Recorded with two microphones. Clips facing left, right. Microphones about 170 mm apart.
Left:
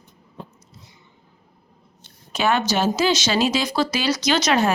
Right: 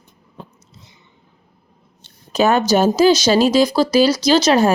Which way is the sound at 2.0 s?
40° right (ahead or behind).